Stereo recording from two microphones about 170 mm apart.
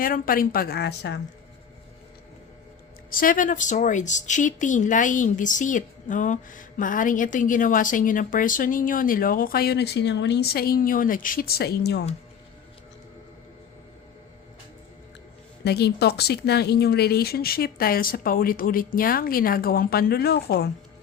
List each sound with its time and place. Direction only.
0.0 s speech: 55° left (ahead or behind); by 1.2 s 85° left
3.1 s speech: 55° left (ahead or behind); by 12.0 s 75° left (ahead or behind)
15.6 s speech: 75° left (ahead or behind)